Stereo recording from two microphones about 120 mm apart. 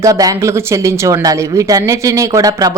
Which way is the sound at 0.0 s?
30° right (ahead or behind).